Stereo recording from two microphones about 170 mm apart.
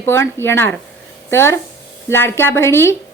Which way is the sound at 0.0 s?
15° left (ahead or behind).